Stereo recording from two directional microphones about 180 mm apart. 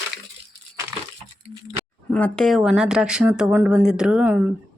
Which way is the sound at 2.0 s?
5° left (ahead or behind).